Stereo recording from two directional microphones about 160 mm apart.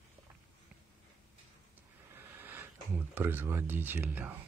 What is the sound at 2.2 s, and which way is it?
Speech, 10° right (ahead or behind).